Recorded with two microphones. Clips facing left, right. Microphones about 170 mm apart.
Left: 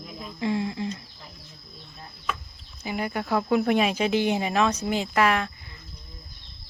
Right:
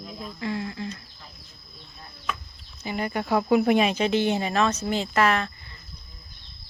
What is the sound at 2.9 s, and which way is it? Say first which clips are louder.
Speech: right 1 dB; 5° left (ahead or behind).